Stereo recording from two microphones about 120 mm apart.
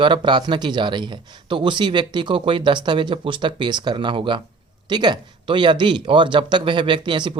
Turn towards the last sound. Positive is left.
turn(degrees=-40)  # may be behind; listen again after turning